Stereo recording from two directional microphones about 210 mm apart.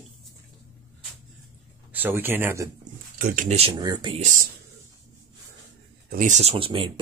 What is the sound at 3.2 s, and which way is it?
Speech, 35° right (ahead or behind).